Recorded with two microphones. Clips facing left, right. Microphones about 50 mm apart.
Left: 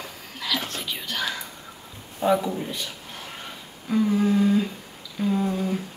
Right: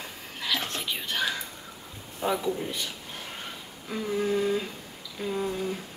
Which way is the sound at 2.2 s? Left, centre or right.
Centre.